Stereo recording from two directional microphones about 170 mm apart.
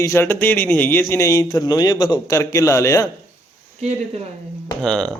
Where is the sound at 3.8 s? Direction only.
40° right (ahead or behind).